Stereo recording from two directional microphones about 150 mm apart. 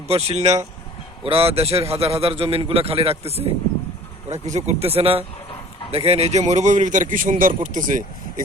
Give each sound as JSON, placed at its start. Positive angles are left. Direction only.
{"t": 0.1, "sound": "a man's voice", "side_deg": -45}